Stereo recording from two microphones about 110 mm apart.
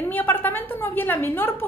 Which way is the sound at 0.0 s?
20° left (ahead or behind).